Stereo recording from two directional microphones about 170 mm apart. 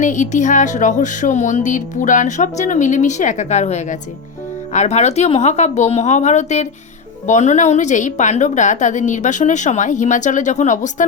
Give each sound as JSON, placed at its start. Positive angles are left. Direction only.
{"t": 0.0, "sound": "a woman's voice", "side_deg": 45}